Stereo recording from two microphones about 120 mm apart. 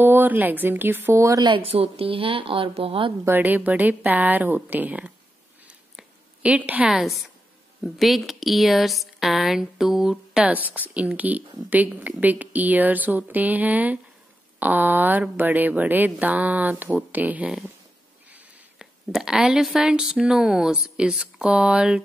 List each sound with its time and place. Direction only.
0.0 s speech: 15° right (ahead or behind)
1.4 s a woman's voice: 45° right (ahead or behind)
3.3 s speech: 15° right (ahead or behind)
5.7 s a sound: 10° right (ahead or behind)
7.8 s a woman's voice: centre (ahead or behind)
18.3 s a sound: 15° right (ahead or behind)
19.1 s a woman's voice: 5° right (ahead or behind)